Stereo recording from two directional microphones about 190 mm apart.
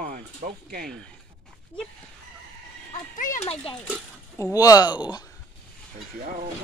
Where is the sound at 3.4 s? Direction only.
30° left (ahead or behind).